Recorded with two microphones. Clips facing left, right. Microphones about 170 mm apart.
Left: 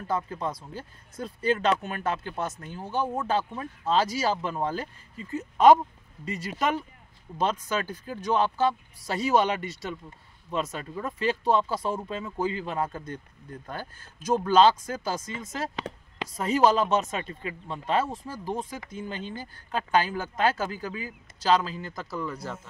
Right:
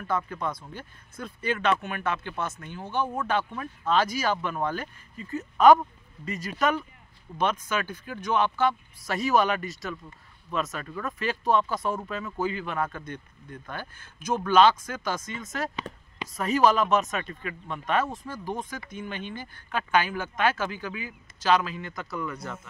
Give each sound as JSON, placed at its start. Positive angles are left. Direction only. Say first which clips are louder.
{"t": 0.0, "sound": "speech", "louder": "even", "side_deg": 30}
{"t": 15.7, "sound": "a sound", "louder": "left 1 dB", "side_deg": 90}
{"t": 16.4, "sound": "speech", "louder": "even", "side_deg": 25}